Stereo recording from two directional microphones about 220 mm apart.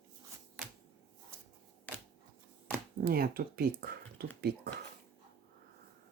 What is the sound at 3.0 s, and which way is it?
Speech, 45° right (ahead or behind).